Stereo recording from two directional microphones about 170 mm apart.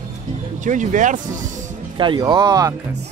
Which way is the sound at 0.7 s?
50° right (ahead or behind).